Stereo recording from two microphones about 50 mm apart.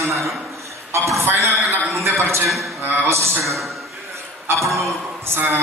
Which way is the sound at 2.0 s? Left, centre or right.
Right.